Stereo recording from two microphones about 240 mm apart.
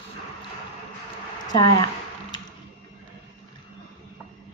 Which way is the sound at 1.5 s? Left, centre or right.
Centre.